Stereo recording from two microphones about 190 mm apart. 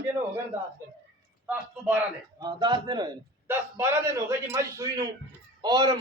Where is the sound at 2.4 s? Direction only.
20° right (ahead or behind).